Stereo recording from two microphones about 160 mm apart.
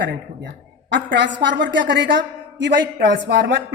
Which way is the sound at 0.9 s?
90° right.